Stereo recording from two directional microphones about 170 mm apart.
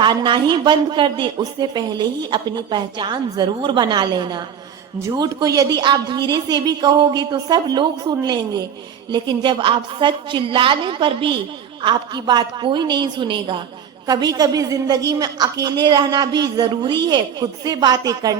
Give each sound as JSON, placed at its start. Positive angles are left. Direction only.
{"t": 0.0, "sound": "speech", "side_deg": -25}